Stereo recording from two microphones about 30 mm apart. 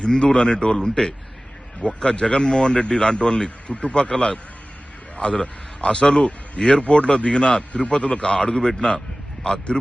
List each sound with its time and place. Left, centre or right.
0.0 s a man's voice: left
1.8 s a man's voice: left
3.7 s a man's voice: left
6.8 s a man's voice: left